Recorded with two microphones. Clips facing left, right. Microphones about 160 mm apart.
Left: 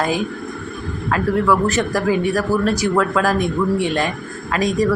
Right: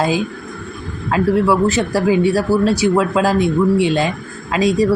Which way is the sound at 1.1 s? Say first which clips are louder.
Right 3 dB; 25° right (ahead or behind).